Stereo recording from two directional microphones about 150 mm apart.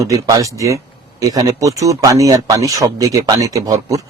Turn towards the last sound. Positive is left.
turn(degrees=-20)  # may be behind; listen again after turning